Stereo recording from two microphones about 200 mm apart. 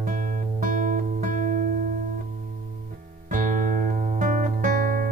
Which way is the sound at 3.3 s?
40° right (ahead or behind).